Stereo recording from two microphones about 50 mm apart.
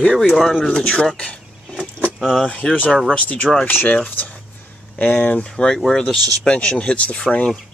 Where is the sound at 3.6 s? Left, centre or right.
Left.